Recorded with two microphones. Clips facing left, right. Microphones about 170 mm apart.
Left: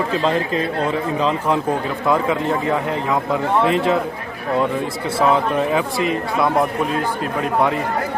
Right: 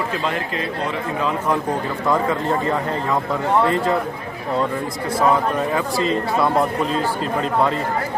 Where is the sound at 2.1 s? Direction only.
15° left (ahead or behind).